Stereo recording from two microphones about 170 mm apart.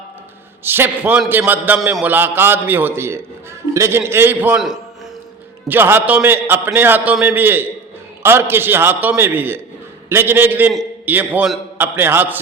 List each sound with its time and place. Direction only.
0.6 s a man's voice: 15° right (ahead or behind)